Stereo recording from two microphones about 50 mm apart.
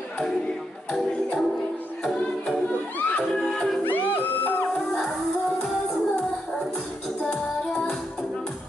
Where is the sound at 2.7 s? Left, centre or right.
Left.